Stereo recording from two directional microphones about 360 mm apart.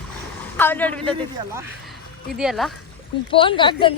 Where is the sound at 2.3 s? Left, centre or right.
Centre.